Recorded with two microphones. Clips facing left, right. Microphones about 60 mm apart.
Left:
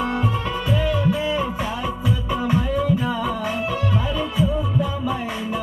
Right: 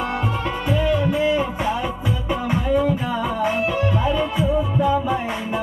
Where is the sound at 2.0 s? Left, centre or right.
Right.